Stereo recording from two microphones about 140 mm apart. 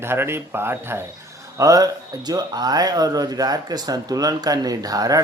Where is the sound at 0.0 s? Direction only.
15° right (ahead or behind).